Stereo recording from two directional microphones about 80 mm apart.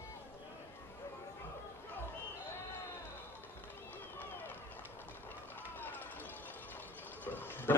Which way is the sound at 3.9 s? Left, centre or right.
Left.